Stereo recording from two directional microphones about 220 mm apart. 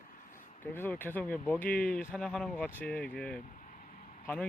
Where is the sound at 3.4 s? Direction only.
35° left (ahead or behind).